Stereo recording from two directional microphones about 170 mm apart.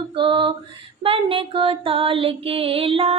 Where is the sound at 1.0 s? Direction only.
30° right (ahead or behind).